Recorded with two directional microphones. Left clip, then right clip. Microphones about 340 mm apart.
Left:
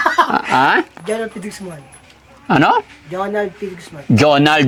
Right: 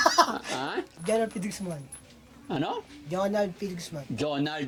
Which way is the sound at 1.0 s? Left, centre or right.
Right.